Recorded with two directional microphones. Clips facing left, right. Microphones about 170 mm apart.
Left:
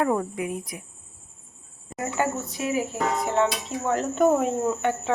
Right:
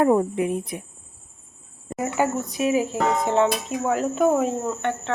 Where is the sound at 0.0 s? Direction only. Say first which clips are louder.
Right 6 dB; 25° right (ahead or behind).